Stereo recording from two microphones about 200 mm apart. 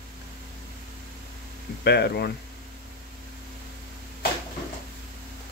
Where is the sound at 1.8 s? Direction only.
55° left (ahead or behind).